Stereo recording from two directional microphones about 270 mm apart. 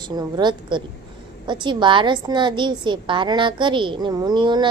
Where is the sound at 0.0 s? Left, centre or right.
Centre.